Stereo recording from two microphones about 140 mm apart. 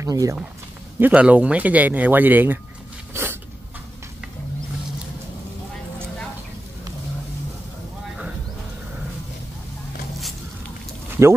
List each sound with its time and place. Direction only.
0.0 s speech: 25° right (ahead or behind)
0.9 s speech: 10° right (ahead or behind)
3.1 s a sound: 15° right (ahead or behind)